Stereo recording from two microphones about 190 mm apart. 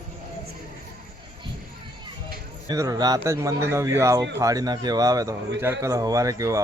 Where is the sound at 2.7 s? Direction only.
20° right (ahead or behind).